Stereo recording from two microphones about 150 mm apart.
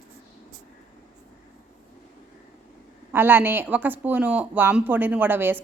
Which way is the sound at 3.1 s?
15° right (ahead or behind).